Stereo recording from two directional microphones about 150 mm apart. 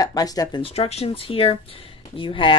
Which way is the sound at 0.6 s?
45° left (ahead or behind).